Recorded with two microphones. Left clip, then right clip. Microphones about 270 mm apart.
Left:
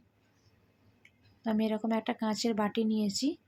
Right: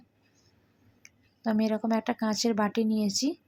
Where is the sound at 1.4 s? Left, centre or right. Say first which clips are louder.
Right 4 dB; centre.